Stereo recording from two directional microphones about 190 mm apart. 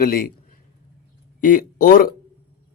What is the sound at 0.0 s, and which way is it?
Speech, 50° left (ahead or behind).